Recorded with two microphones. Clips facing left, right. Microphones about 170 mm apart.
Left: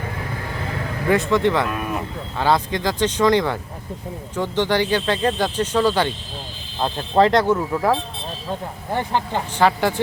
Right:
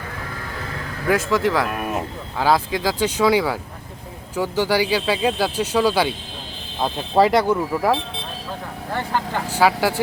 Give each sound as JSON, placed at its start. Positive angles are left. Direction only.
{"t": 1.0, "sound": "speech", "side_deg": -5}
{"t": 8.9, "sound": "speech", "side_deg": 20}
{"t": 9.5, "sound": "speech", "side_deg": -5}